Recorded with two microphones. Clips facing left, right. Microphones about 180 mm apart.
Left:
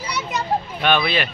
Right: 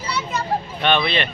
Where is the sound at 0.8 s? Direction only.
5° left (ahead or behind).